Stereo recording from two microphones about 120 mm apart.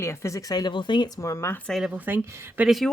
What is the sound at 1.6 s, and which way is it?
Speech, centre (ahead or behind).